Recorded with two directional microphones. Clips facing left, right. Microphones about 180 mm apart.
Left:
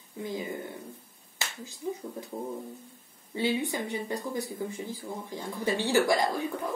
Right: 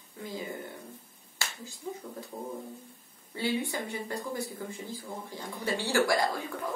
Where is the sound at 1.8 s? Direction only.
15° left (ahead or behind).